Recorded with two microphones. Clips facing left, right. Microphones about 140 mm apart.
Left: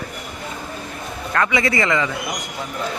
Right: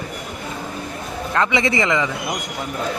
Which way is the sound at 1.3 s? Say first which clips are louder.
Even; 20° right (ahead or behind).